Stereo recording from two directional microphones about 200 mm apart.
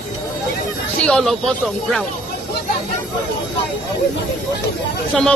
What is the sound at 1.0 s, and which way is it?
Speech, 5° left (ahead or behind).